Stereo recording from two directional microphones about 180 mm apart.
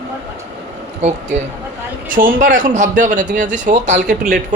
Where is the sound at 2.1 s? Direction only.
50° right (ahead or behind).